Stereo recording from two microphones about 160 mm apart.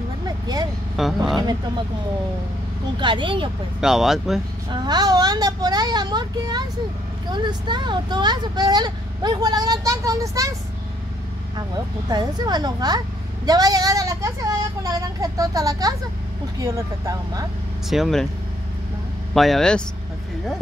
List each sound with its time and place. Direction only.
1.0 s speech: centre (ahead or behind)
3.0 s speech: 30° right (ahead or behind)
3.8 s speech: centre (ahead or behind)
4.6 s speech: 25° right (ahead or behind)
11.5 s speech: 25° right (ahead or behind)
17.8 s speech: centre (ahead or behind)
19.3 s speech: centre (ahead or behind)